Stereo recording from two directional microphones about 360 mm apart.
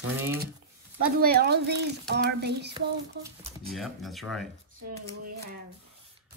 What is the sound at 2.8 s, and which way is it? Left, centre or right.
Speech, centre.